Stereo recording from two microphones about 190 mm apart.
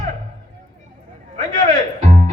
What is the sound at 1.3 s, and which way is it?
Music, 40° right (ahead or behind).